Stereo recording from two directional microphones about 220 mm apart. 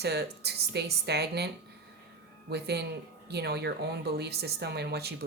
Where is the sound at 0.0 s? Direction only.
45° right (ahead or behind).